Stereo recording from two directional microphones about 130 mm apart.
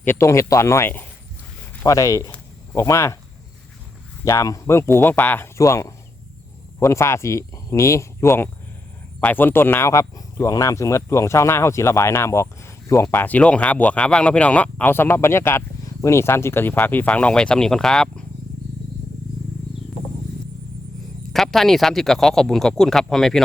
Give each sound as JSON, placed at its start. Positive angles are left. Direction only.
{"t": 0.0, "sound": "speech", "side_deg": 20}
{"t": 4.3, "sound": "speech", "side_deg": 25}
{"t": 21.3, "sound": "speech", "side_deg": 0}